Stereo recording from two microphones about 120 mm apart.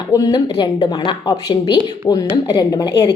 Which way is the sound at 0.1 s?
30° left (ahead or behind).